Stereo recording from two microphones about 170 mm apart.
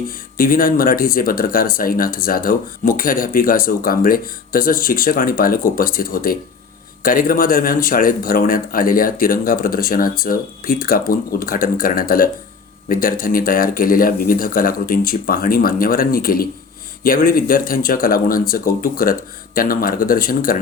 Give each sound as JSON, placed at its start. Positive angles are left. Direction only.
{"t": 0.3, "sound": "speech", "side_deg": 55}